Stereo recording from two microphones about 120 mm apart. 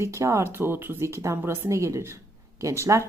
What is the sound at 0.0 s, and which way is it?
Speech, 25° right (ahead or behind).